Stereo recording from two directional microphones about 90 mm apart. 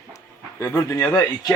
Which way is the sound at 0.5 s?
30° left (ahead or behind).